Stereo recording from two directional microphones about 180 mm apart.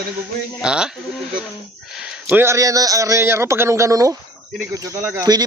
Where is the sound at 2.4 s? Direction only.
15° right (ahead or behind).